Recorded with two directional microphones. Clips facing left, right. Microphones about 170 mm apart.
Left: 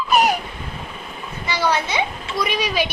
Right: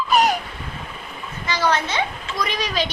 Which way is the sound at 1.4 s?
10° left (ahead or behind).